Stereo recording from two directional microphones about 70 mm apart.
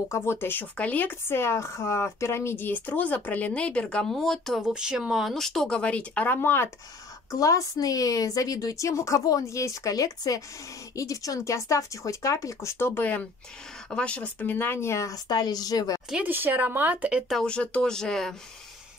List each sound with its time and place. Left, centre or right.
0.1 s speech: left; by 4.0 s centre
4.0 s speech: centre
5.3 s speech: centre
6.3 s speech: left
7.2 s speech: left
13.0 s speech: left
15.2 s speech: left
16.2 s speech: right
17.5 s speech: centre